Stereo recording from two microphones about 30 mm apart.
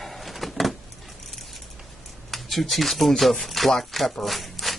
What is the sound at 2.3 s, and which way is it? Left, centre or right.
Speech, centre.